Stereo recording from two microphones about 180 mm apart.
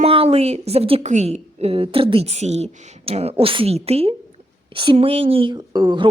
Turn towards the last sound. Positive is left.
turn(degrees=-25)  # may be behind; listen again after turning